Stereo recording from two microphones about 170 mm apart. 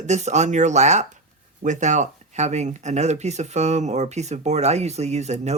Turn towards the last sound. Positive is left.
turn(degrees=-40)  # may be behind; listen again after turning